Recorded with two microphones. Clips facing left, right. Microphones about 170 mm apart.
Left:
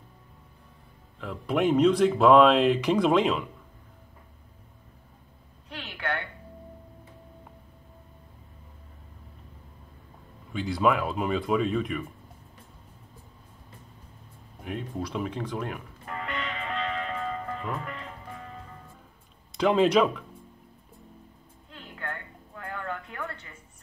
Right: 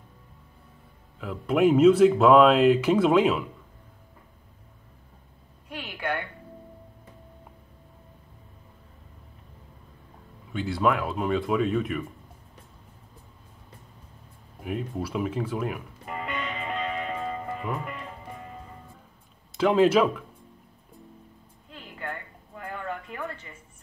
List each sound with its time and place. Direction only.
1.2 s speech: 5° right (ahead or behind)
5.7 s a sound: 10° right (ahead or behind)
10.5 s speech: centre (ahead or behind)
14.6 s speech: 5° right (ahead or behind)
16.2 s music: 15° right (ahead or behind)
19.5 s speech: centre (ahead or behind)
22.7 s a sound: 10° right (ahead or behind)